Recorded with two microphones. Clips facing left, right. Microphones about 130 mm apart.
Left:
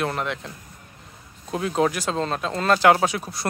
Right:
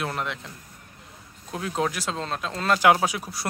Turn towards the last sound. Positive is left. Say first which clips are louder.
# left 2 dB
turn(degrees=-5)  # may be behind; listen again after turning